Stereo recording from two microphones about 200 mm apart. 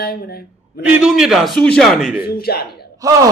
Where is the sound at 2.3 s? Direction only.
50° left (ahead or behind).